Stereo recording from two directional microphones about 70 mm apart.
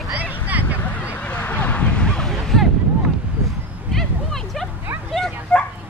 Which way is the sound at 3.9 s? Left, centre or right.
Centre.